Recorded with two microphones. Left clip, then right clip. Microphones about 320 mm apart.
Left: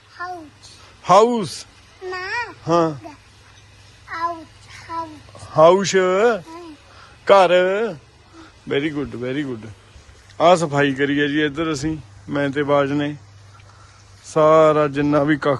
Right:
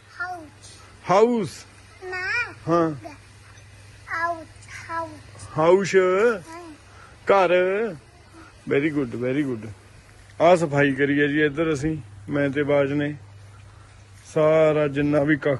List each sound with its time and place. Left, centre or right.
1.0 s a man's voice: centre
2.0 s a sound: left
2.6 s a man's voice: centre
4.1 s a sound: centre
5.5 s a man's voice: centre
14.3 s speech: centre